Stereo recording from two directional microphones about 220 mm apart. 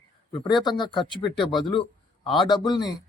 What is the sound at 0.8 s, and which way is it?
A man's voice, 20° left (ahead or behind).